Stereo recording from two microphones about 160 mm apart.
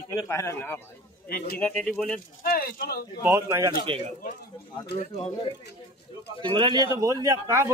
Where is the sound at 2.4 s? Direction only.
70° left (ahead or behind).